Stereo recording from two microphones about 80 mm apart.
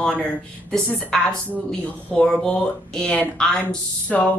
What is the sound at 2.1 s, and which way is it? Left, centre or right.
Speech, centre.